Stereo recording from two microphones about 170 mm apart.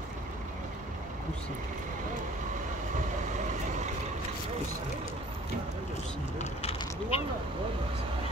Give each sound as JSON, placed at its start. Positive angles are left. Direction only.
{"t": 6.3, "sound": "speech", "side_deg": 40}